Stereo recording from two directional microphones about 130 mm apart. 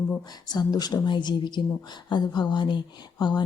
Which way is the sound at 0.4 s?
30° left (ahead or behind).